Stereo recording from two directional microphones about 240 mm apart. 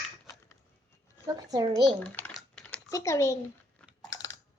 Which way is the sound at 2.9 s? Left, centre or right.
Centre.